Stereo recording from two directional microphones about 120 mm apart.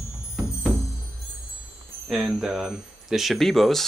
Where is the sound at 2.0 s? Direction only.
5° right (ahead or behind).